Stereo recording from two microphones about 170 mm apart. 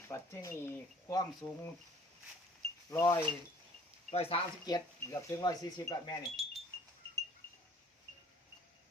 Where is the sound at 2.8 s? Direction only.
15° left (ahead or behind).